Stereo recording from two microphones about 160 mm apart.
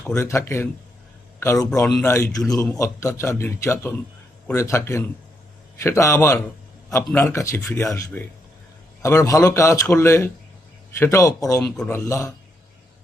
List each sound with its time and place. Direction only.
0.1 s a man's voice: 20° left (ahead or behind)
1.7 s a man's voice: 20° left (ahead or behind)